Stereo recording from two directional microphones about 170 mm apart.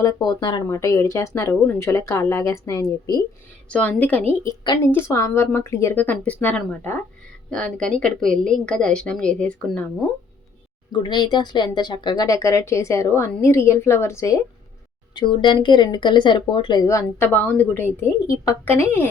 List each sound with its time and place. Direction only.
0.0 s speech: 20° left (ahead or behind)
3.7 s a woman's voice: 10° left (ahead or behind)
10.9 s speech: 25° left (ahead or behind)
17.2 s speech: 10° left (ahead or behind)